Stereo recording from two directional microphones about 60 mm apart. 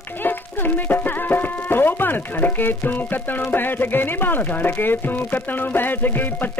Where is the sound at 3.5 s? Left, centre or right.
Left.